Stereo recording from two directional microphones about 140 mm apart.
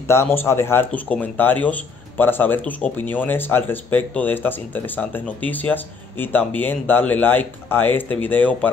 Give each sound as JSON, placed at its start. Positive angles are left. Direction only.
{"t": 0.1, "sound": "speech", "side_deg": 15}